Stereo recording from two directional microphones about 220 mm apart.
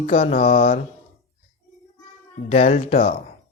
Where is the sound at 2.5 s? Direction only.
30° left (ahead or behind).